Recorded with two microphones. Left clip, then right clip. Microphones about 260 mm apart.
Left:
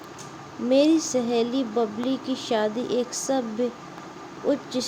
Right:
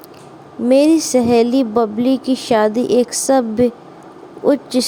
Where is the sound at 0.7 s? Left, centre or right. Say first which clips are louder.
Right 8 dB; right.